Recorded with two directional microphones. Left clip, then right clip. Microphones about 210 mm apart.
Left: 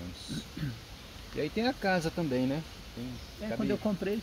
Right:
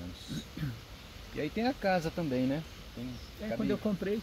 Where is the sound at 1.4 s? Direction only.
15° left (ahead or behind).